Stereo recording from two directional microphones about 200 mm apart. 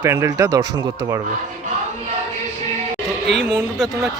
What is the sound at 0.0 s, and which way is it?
Speech, 15° right (ahead or behind).